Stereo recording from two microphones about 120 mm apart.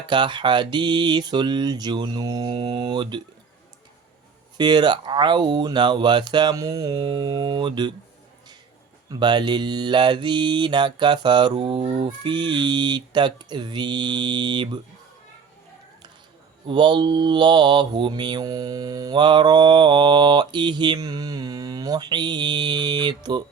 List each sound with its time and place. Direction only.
0.1 s mantra: 40° right (ahead or behind)
4.5 s mantra: 40° right (ahead or behind)
9.0 s mantra: 40° right (ahead or behind)
16.6 s mantra: 40° right (ahead or behind)